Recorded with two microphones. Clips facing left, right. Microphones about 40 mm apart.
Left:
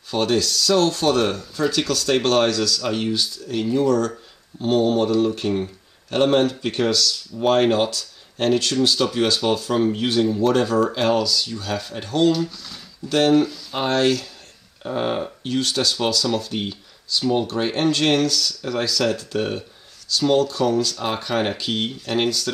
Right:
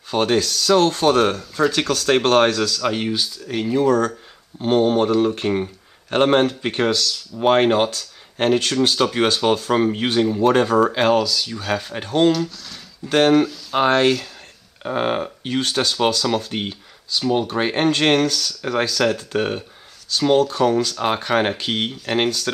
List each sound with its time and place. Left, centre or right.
0.1 s speech: right
1.3 s speech: centre
1.7 s speech: right
6.6 s speech: right
11.1 s speech: centre
11.6 s speech: right
12.3 s speech: centre
13.1 s speech: right
17.3 s speech: centre
17.6 s speech: right